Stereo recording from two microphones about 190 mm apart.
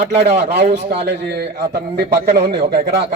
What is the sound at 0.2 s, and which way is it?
A man's voice, 60° right (ahead or behind).